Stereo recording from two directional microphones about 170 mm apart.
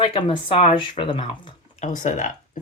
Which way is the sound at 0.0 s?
30° left (ahead or behind).